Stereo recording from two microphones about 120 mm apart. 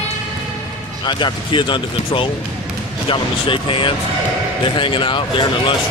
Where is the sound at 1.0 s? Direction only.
40° left (ahead or behind).